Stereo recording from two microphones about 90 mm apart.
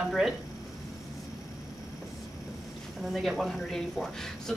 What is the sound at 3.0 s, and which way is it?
Speech, centre (ahead or behind).